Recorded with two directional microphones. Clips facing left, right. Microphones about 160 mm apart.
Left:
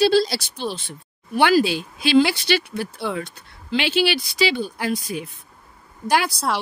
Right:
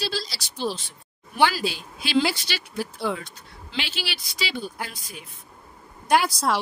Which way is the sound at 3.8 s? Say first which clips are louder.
Left 12 dB; 70° left (ahead or behind).